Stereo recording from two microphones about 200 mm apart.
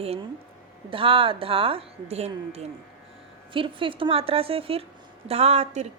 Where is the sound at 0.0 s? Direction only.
30° right (ahead or behind).